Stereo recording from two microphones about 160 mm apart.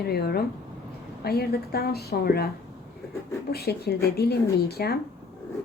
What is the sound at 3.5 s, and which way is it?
Speech, 75° left (ahead or behind).